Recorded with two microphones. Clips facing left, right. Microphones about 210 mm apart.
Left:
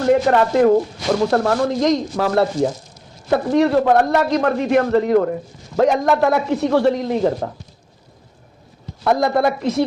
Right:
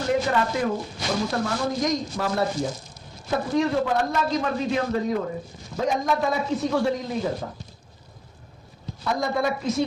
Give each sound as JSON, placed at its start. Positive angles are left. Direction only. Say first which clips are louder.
{"t": 0.0, "sound": "a man's voice", "louder": "left 8 dB", "side_deg": 60}
{"t": 9.0, "sound": "a man's voice", "louder": "left 8 dB", "side_deg": 65}